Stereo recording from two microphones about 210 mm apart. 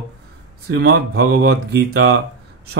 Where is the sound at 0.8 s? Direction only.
50° right (ahead or behind).